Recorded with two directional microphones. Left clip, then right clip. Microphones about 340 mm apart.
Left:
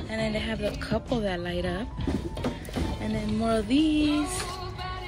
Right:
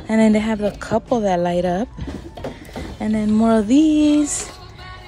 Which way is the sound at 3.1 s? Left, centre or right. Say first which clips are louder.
Right 10 dB; centre.